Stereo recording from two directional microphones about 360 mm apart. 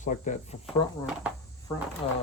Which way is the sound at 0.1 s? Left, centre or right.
Centre.